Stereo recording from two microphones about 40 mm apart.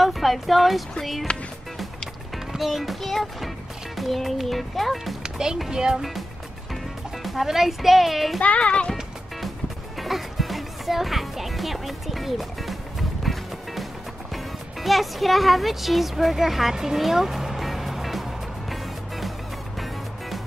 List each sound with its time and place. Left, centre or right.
0.0 s speech: centre
1.3 s a child's voice: left
2.3 s a child's voice: centre
5.2 s music: centre
5.7 s speech: centre
7.2 s speech: centre
8.4 s a child's voice: left
9.9 s speech: centre
13.2 s music: centre
14.3 s speech: centre
18.7 s music: centre